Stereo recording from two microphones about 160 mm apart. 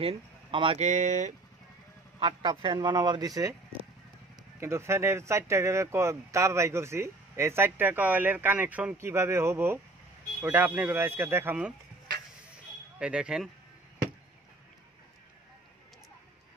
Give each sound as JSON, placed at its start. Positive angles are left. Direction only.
{"t": 0.0, "sound": "speech", "side_deg": -35}
{"t": 0.7, "sound": "speech", "side_deg": -50}
{"t": 2.1, "sound": "speech", "side_deg": -35}
{"t": 4.6, "sound": "speech", "side_deg": -15}
{"t": 13.0, "sound": "speech", "side_deg": -5}